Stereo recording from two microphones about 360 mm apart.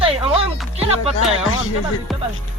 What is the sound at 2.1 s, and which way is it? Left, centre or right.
Speech, centre.